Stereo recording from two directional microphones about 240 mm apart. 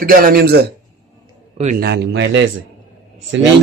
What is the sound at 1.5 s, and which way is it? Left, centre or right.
Speech, right.